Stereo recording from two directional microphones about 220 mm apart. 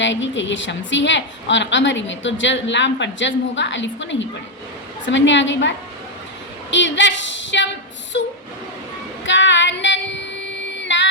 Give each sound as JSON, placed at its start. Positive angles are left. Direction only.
{"t": 0.0, "sound": "a woman's voice", "side_deg": 55}
{"t": 8.1, "sound": "a sound", "side_deg": 50}
{"t": 9.2, "sound": "child singing", "side_deg": 55}